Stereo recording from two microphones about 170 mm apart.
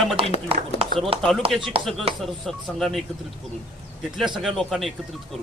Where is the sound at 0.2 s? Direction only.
30° right (ahead or behind).